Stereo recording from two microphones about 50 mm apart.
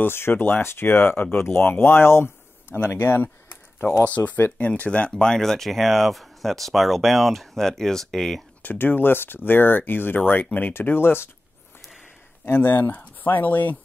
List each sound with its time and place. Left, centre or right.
0.0 s speech: left
4.0 s speech: left; by 8.4 s centre
8.6 s speech: left
10.7 s speech: left
12.4 s speech: left